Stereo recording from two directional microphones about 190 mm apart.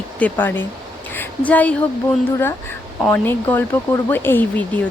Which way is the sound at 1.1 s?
10° left (ahead or behind).